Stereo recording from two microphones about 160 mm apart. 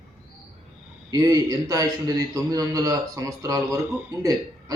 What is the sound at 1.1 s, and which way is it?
A man's voice, 25° right (ahead or behind).